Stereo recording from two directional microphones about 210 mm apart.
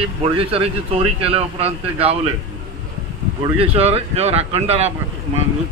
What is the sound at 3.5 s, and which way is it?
Speech, 30° right (ahead or behind).